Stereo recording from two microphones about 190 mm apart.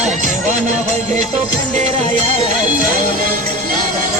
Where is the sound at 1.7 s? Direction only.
35° right (ahead or behind).